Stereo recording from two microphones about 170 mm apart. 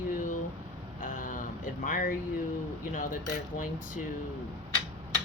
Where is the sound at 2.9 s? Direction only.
50° left (ahead or behind).